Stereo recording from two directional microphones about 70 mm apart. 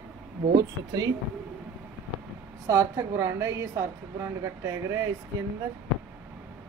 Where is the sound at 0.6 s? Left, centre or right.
Right.